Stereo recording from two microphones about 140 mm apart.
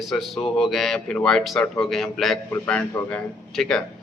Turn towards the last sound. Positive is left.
turn(degrees=5)  # may be behind; listen again after turning